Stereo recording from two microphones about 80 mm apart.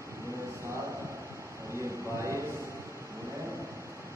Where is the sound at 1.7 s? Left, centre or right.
Right.